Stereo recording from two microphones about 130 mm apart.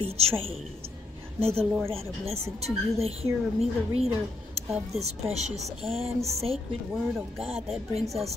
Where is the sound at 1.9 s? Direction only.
50° right (ahead or behind).